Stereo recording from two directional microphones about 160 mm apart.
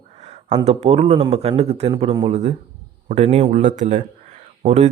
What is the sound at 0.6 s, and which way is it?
A man's voice, 40° right (ahead or behind).